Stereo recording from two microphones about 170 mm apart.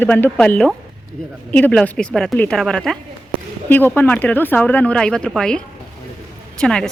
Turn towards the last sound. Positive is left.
turn(degrees=5)  # may be behind; listen again after turning